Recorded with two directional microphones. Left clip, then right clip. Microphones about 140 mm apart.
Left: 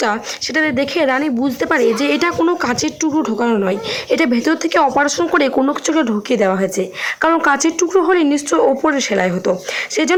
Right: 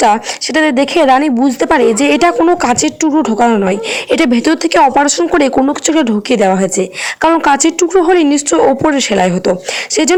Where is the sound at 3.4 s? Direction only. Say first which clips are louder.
Right 7 dB; 20° right (ahead or behind).